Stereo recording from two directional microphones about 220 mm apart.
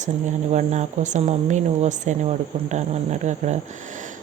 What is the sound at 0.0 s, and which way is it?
Speech, 30° right (ahead or behind).